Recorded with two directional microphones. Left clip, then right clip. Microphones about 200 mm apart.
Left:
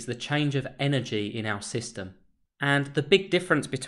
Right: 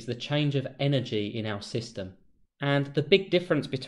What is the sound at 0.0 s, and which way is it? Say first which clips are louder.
Speech: left 1 dB; 20° left (ahead or behind).